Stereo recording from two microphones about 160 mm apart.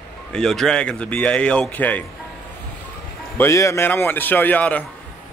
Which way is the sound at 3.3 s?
20° left (ahead or behind).